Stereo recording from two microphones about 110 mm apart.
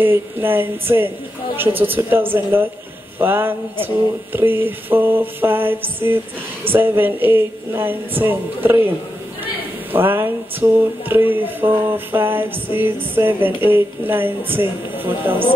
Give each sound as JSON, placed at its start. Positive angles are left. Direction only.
{"t": 0.0, "sound": "speech", "side_deg": -20}
{"t": 9.9, "sound": "speech", "side_deg": -20}